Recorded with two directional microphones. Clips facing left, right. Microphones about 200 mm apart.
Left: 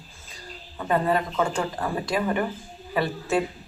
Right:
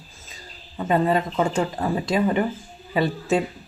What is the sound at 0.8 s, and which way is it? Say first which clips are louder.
Speech: right 3 dB; 20° right (ahead or behind).